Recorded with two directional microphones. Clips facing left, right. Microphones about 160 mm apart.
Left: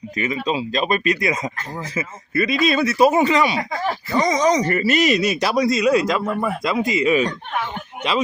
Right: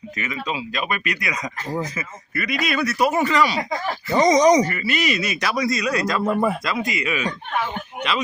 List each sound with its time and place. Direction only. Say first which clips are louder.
0.2 s speech: left 6 dB; 30° left (ahead or behind)
4.1 s speech: right 4 dB; 20° right (ahead or behind)
4.6 s speech: left 5 dB; 40° left (ahead or behind)
6.2 s speech: right 3 dB; 15° right (ahead or behind)
6.7 s speech: left 6 dB; 25° left (ahead or behind)